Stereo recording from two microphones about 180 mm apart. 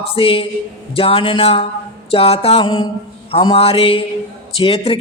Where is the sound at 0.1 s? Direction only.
30° left (ahead or behind).